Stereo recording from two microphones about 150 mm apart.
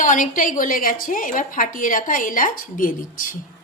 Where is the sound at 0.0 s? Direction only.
60° left (ahead or behind).